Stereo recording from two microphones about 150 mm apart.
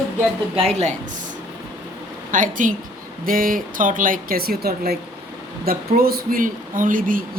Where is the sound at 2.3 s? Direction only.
60° right (ahead or behind).